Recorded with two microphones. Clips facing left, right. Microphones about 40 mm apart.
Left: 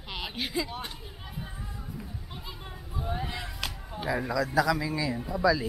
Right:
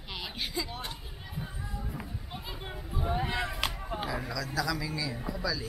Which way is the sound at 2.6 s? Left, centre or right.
Centre.